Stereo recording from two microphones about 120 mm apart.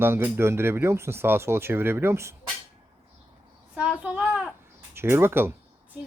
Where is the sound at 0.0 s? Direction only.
20° right (ahead or behind).